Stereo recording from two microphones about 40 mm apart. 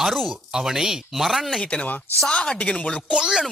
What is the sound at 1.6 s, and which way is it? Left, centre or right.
Speech, left.